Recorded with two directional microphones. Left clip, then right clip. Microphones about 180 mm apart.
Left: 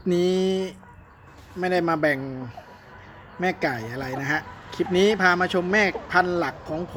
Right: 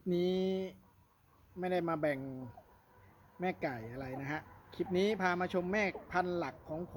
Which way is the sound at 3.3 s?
10° right (ahead or behind).